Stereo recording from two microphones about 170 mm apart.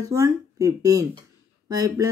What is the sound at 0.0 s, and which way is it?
Speech, 20° right (ahead or behind).